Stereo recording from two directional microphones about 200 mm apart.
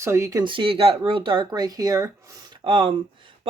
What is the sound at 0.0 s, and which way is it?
Speech, 15° right (ahead or behind).